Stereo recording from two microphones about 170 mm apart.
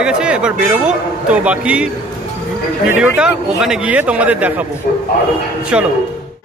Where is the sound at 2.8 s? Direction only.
5° right (ahead or behind).